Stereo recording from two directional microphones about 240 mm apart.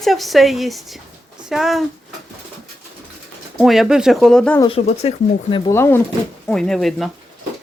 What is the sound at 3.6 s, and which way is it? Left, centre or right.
Speech, centre.